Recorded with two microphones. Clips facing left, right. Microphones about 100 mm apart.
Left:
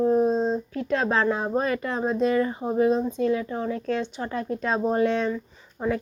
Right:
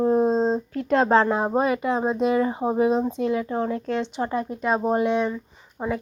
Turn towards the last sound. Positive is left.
turn(degrees=-20)  # may be behind; listen again after turning